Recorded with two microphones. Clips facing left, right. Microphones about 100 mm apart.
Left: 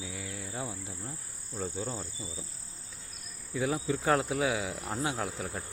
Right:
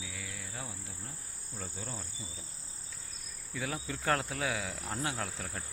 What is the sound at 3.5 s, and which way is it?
Insect, 15° left (ahead or behind).